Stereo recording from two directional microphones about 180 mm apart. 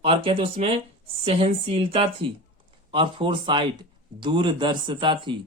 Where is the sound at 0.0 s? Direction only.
30° right (ahead or behind).